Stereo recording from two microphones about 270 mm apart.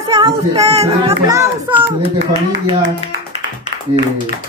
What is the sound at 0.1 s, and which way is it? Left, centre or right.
A child's voice, centre.